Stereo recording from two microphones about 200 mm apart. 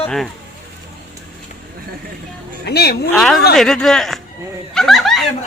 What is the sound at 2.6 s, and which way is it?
Speech, 55° left (ahead or behind).